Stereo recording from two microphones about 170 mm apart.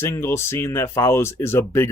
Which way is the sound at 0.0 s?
15° left (ahead or behind).